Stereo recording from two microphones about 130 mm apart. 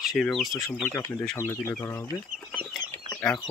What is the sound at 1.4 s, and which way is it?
Speech, 20° left (ahead or behind).